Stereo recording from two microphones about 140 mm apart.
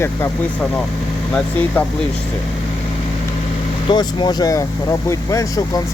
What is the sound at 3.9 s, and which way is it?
Speech, 35° left (ahead or behind).